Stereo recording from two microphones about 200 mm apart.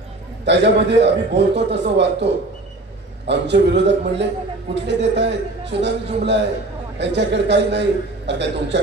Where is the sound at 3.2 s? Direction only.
60° right (ahead or behind).